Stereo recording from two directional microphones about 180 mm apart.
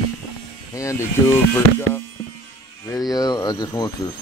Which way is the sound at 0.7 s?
15° left (ahead or behind).